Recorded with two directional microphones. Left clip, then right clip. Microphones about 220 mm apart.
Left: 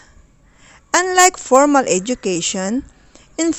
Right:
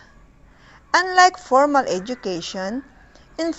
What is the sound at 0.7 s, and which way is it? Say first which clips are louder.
A woman's voice: left 2 dB; 35° left (ahead or behind).